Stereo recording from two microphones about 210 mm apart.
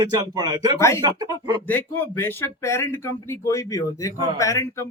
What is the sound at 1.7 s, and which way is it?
Speech, 10° left (ahead or behind).